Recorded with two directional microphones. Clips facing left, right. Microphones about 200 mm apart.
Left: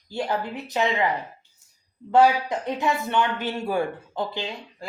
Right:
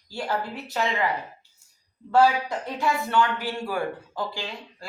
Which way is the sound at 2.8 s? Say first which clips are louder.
Right 2 dB; 20° left (ahead or behind).